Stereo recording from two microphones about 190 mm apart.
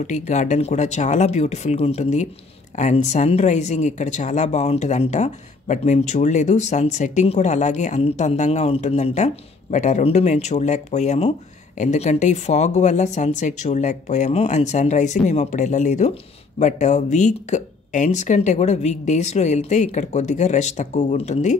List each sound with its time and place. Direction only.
0.0 s speech: 40° left (ahead or behind)